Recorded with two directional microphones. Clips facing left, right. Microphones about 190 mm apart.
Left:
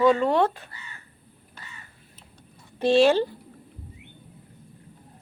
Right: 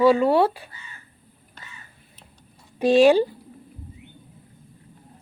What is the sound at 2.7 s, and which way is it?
Speech, 15° right (ahead or behind).